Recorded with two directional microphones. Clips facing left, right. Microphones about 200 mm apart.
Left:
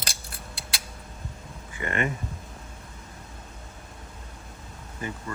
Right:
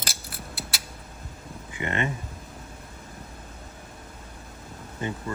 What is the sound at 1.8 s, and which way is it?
Speech, 25° right (ahead or behind).